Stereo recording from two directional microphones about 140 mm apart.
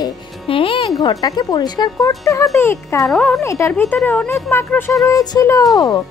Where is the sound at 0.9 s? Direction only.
25° left (ahead or behind).